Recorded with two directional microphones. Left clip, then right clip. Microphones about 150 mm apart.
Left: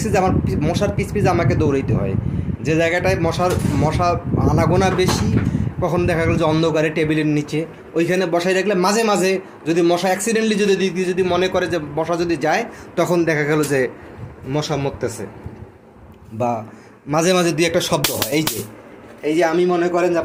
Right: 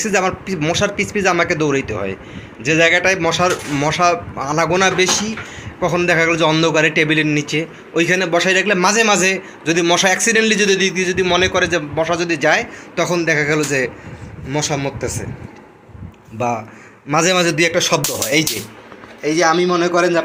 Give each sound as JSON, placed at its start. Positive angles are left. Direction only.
{"t": 0.0, "sound": "speech", "side_deg": 5}
{"t": 13.0, "sound": "a man's voice", "side_deg": 25}
{"t": 14.5, "sound": "speech", "side_deg": 10}
{"t": 16.4, "sound": "speech", "side_deg": 5}
{"t": 19.2, "sound": "a man's voice", "side_deg": -15}